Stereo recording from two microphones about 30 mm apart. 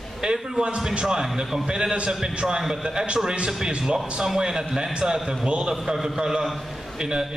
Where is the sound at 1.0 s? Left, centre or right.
Centre.